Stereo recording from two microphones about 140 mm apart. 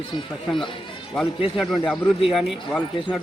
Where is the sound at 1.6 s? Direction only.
5° left (ahead or behind).